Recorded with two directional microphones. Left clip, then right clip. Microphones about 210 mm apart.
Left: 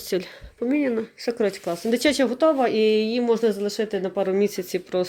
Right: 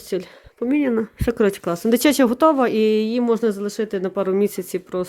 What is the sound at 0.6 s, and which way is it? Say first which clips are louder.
Speech: right 3 dB; 35° right (ahead or behind).